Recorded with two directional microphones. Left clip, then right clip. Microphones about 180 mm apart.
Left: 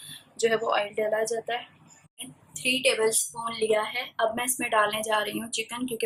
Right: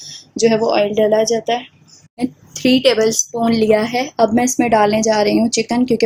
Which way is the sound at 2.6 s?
35° right (ahead or behind).